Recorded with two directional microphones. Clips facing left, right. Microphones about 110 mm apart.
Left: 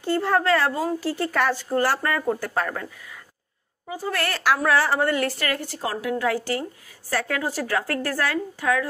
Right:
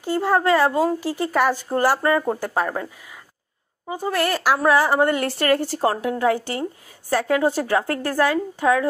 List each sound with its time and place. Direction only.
0.0 s speech: 10° right (ahead or behind)
3.9 s a woman's voice: 15° right (ahead or behind)